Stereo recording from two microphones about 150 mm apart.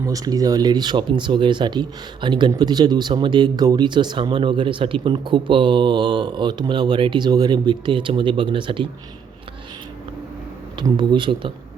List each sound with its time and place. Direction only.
0.0 s speech: 25° right (ahead or behind)
10.8 s speech: 30° right (ahead or behind)